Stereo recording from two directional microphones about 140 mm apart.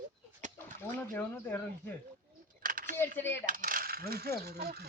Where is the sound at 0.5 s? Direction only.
15° left (ahead or behind).